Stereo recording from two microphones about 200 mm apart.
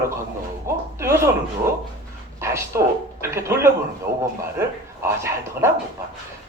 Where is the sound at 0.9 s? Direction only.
15° right (ahead or behind).